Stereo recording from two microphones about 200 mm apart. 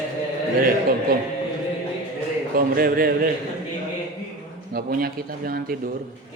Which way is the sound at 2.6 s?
45° right (ahead or behind).